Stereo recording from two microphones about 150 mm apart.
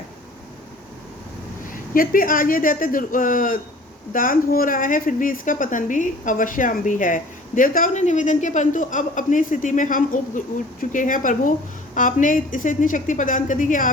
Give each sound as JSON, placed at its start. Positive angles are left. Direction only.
{"t": 1.7, "sound": "a woman's voice", "side_deg": 70}